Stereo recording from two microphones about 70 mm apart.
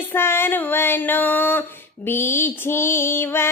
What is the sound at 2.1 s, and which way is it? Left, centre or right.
Mantra, left.